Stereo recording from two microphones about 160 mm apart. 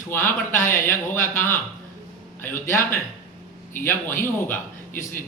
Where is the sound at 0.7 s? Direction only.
15° left (ahead or behind).